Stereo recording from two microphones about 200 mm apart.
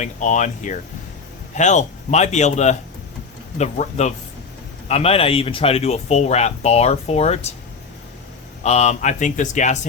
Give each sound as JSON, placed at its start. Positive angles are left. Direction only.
{"t": 0.0, "sound": "speech", "side_deg": 35}
{"t": 8.6, "sound": "speech", "side_deg": 35}